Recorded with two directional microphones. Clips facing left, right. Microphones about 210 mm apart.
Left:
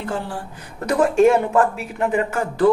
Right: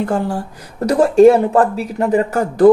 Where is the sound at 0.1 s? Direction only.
40° right (ahead or behind).